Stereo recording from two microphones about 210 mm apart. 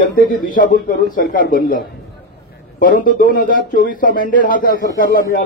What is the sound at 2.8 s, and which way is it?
A man's voice, 40° left (ahead or behind).